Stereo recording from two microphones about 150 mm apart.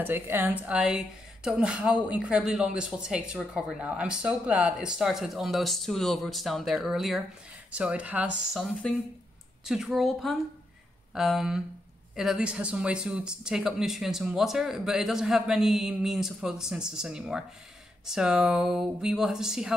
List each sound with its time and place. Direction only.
0.0 s speech: 15° right (ahead or behind)
8.8 s speech: 5° left (ahead or behind)